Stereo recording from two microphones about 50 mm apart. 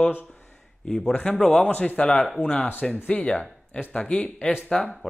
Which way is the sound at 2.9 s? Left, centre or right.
Left.